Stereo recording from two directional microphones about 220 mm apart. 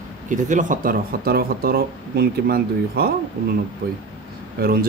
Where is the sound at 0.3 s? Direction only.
35° right (ahead or behind).